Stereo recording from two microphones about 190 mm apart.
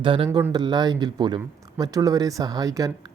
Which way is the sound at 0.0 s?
25° right (ahead or behind).